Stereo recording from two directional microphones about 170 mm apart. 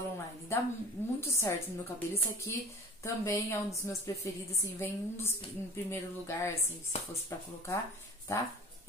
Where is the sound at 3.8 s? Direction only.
15° left (ahead or behind).